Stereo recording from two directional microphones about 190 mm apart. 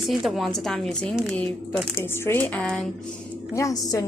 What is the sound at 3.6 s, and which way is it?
Speech, 15° left (ahead or behind).